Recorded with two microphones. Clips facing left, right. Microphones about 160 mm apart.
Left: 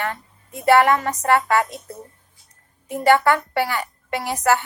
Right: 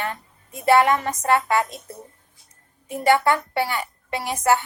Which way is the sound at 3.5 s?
20° right (ahead or behind).